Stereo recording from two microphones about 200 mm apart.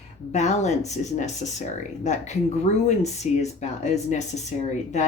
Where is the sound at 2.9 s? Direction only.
35° left (ahead or behind).